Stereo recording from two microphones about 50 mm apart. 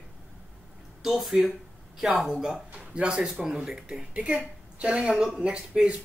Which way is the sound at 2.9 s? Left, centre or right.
Right.